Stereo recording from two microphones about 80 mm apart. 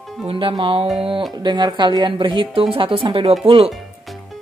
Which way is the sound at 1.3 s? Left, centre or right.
Right.